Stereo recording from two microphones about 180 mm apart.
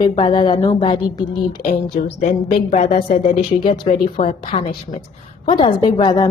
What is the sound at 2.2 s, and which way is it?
Speech, 40° left (ahead or behind).